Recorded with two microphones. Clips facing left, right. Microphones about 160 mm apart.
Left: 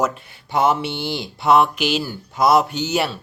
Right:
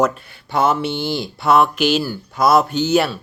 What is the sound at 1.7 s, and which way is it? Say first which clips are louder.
Speech: right 4 dB; 50° right (ahead or behind).